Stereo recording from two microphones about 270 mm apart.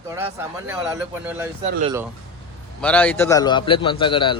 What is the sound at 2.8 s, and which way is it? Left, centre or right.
A man's voice, centre.